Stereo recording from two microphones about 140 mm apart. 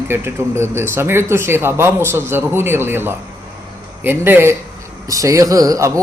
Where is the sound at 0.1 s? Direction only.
15° right (ahead or behind).